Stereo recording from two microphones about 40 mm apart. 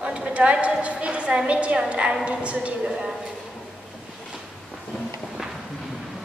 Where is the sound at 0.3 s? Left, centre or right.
Right.